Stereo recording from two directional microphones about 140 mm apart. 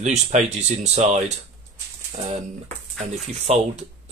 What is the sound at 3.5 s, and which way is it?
Speech, 50° right (ahead or behind).